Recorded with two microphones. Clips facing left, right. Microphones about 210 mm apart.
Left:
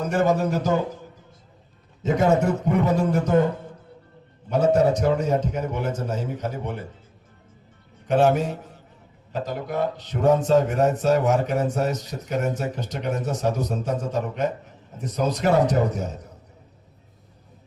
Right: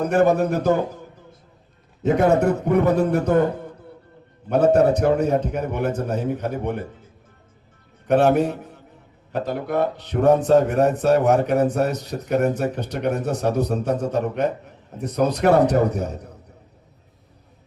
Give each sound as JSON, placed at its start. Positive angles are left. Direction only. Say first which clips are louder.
{"t": 0.0, "sound": "a man's voice", "louder": "right 4 dB", "side_deg": -60}
{"t": 2.0, "sound": "a man's voice", "louder": "right 3 dB", "side_deg": -60}
{"t": 4.4, "sound": "a man's voice", "louder": "right 3 dB", "side_deg": -60}
{"t": 8.0, "sound": "a man's voice", "louder": "right 3 dB", "side_deg": -60}